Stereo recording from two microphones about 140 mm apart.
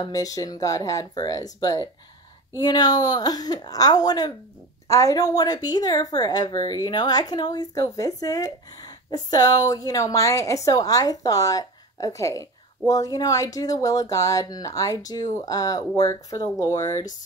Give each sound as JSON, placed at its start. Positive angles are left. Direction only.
{"t": 0.0, "sound": "a woman's voice", "side_deg": 25}